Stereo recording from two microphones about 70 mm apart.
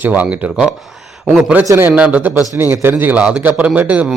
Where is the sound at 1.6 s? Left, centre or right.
Right.